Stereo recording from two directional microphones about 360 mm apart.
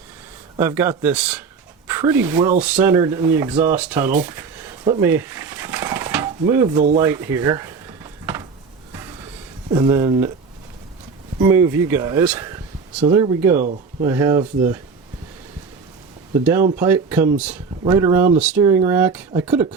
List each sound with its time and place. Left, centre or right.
0.5 s speech: centre
4.9 s a sound: centre
7.0 s drawer open or close: centre
9.6 s speech: centre
11.3 s speech: centre
13.6 s speech: centre
14.1 s speech: centre
16.4 s speech: centre